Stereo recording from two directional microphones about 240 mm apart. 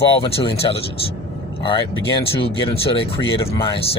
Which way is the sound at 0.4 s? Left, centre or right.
Left.